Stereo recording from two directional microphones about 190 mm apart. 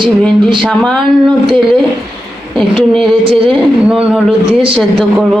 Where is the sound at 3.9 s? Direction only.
5° right (ahead or behind).